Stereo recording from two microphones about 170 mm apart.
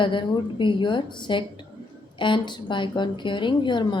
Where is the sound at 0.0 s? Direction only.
30° left (ahead or behind).